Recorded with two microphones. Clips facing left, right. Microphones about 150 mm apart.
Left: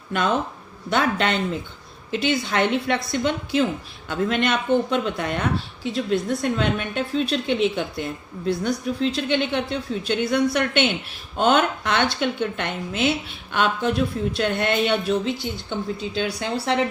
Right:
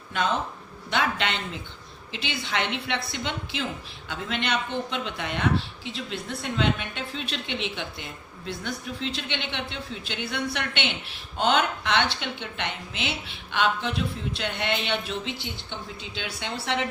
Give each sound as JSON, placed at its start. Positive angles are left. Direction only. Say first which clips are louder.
{"t": 0.9, "sound": "speech", "louder": "left 5 dB", "side_deg": 45}